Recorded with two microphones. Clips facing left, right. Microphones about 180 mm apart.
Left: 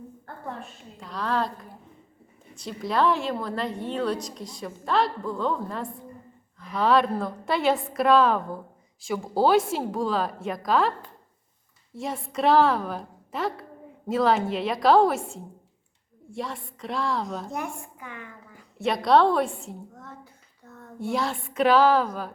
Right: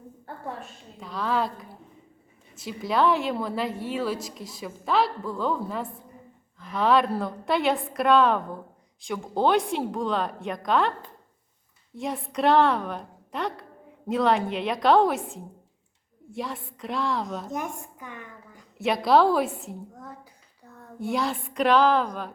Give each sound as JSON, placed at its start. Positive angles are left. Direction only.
{"t": 0.6, "sound": "a woman's voice", "side_deg": 0}
{"t": 11.9, "sound": "a woman's voice", "side_deg": 0}
{"t": 17.5, "sound": "a woman's voice", "side_deg": -20}
{"t": 18.8, "sound": "a woman's voice", "side_deg": 0}
{"t": 21.0, "sound": "a woman's voice", "side_deg": 0}